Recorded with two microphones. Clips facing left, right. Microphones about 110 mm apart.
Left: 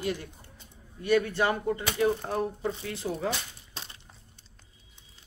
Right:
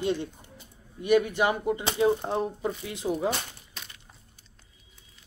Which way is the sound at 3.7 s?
30° left (ahead or behind).